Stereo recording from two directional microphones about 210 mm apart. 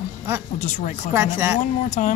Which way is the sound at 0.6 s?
35° left (ahead or behind).